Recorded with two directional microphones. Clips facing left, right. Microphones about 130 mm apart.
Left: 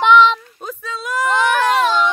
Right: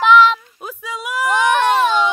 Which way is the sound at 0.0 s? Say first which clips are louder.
Even; centre (ahead or behind).